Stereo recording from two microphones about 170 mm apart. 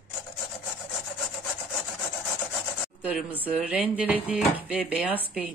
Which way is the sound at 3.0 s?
5° right (ahead or behind).